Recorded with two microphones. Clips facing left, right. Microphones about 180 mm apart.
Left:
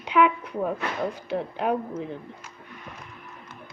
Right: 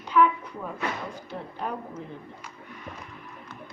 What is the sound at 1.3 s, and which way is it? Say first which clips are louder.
Speech: left 7 dB; 70° left (ahead or behind).